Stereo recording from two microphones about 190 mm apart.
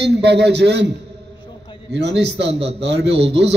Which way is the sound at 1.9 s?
65° right (ahead or behind).